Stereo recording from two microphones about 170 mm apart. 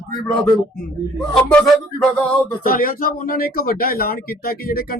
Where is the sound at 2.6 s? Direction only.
55° left (ahead or behind).